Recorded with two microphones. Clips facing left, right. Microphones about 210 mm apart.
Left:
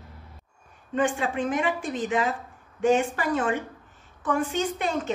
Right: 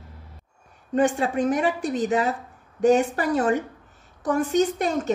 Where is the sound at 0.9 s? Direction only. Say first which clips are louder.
Right 4 dB; 40° right (ahead or behind).